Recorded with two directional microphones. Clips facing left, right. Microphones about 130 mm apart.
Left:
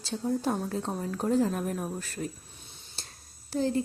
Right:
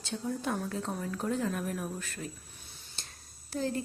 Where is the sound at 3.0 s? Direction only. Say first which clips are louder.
Left 3 dB; 35° left (ahead or behind).